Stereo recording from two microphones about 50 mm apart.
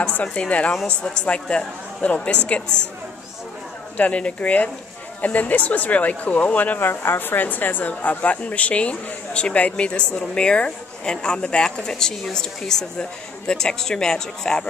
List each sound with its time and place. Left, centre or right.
0.0 s speech: left
3.9 s speech: left
6.8 s a woman's voice: left; by 14.7 s centre